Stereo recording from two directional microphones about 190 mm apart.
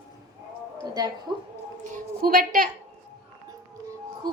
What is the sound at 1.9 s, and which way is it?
Speech, 50° right (ahead or behind).